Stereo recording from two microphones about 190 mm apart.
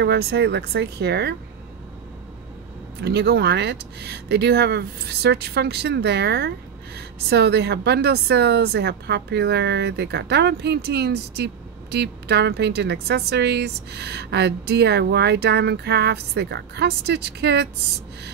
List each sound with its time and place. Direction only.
0.0 s a woman's voice: 60° right (ahead or behind)
3.0 s a woman's voice: 60° right (ahead or behind)